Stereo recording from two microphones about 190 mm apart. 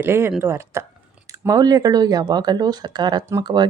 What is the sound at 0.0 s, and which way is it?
Speech, 10° right (ahead or behind).